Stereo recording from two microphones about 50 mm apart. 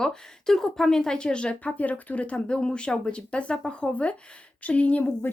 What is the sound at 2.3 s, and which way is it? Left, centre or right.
Speech, centre.